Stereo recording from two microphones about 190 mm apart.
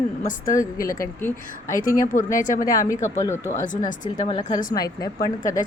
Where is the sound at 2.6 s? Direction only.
15° left (ahead or behind).